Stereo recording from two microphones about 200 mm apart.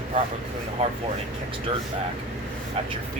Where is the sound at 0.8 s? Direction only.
30° right (ahead or behind).